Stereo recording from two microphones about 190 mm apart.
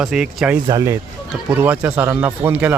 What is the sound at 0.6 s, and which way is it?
Speech, 15° right (ahead or behind).